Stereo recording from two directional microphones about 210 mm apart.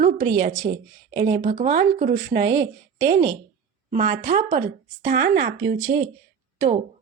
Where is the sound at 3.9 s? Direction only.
40° right (ahead or behind).